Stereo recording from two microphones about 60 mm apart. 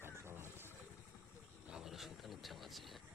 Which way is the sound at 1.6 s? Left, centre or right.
Centre.